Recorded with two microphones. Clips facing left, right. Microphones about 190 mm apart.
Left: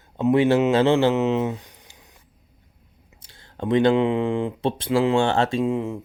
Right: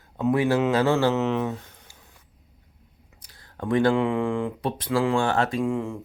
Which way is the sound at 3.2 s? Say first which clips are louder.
Left 3 dB; 25° left (ahead or behind).